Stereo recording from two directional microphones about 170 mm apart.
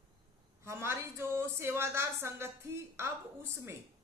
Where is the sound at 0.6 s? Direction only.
15° right (ahead or behind).